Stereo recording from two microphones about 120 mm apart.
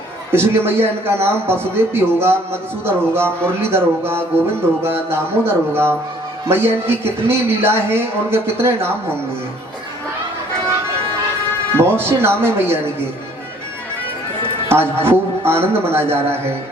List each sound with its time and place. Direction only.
0.3 s a man's voice: 20° right (ahead or behind)
11.8 s a man's voice: 20° right (ahead or behind)
14.7 s a man's voice: 20° right (ahead or behind)